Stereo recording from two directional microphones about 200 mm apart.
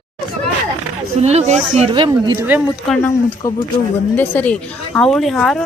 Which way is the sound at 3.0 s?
15° left (ahead or behind).